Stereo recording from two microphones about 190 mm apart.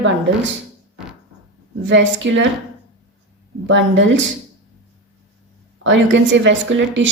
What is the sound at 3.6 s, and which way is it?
Speech, 75° right (ahead or behind).